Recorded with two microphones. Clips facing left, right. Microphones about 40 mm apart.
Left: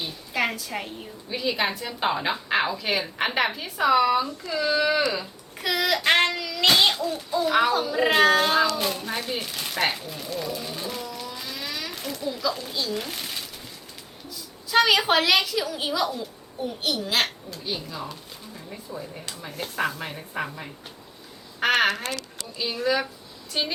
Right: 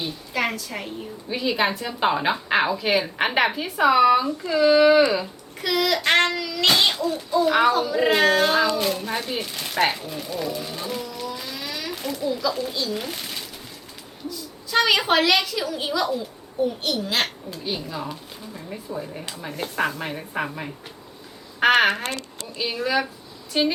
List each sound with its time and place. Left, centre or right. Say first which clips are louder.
0.0 s a sound: right 1 dB; centre
0.5 s a woman's voice: even; centre
1.3 s a woman's voice: right 3 dB; centre
5.6 s a child's voice: right 1 dB; centre; by 22.4 s right
22.5 s a woman's voice: right 1 dB; centre